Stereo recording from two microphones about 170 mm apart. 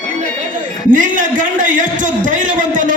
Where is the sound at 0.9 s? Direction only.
50° right (ahead or behind).